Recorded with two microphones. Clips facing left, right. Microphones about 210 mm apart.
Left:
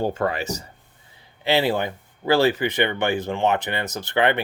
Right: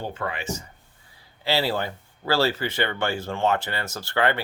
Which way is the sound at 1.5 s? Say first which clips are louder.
Left 4 dB; 20° left (ahead or behind).